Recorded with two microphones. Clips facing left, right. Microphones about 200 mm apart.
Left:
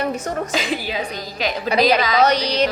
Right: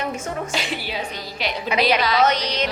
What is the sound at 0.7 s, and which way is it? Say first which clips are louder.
A woman's voice: left 4 dB; 40° left (ahead or behind).